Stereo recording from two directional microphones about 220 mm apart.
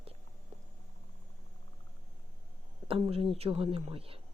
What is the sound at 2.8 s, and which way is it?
Speech, 25° right (ahead or behind).